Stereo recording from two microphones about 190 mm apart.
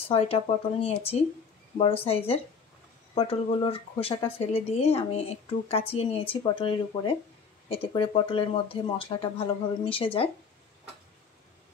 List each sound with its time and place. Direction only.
0.1 s speech: 30° left (ahead or behind)